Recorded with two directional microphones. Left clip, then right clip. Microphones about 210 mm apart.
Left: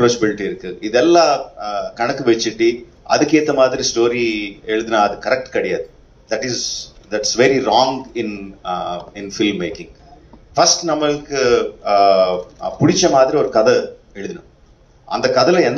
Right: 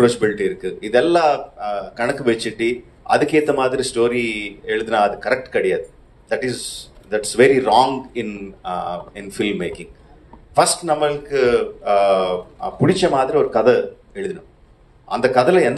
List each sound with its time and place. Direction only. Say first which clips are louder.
0.0 s a man's voice: even; 55° right (ahead or behind)